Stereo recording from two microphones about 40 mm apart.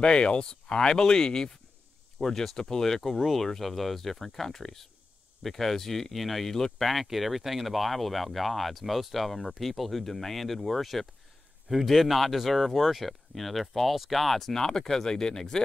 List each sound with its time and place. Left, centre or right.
0.0 s speech: left
6.9 s speech: centre